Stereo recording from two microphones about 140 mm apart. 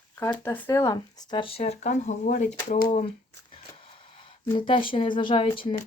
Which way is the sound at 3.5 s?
40° left (ahead or behind).